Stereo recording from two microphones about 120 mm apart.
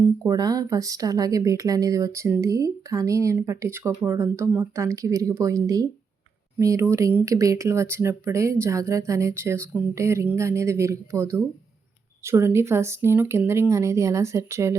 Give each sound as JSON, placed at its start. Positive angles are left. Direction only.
{"t": 0.3, "sound": "a woman's voice", "side_deg": -30}